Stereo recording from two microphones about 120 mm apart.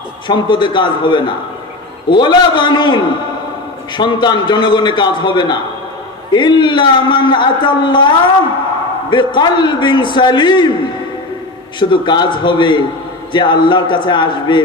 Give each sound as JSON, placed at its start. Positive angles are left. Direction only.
{"t": 0.3, "sound": "a man's voice", "side_deg": 40}
{"t": 11.8, "sound": "a man's voice", "side_deg": 40}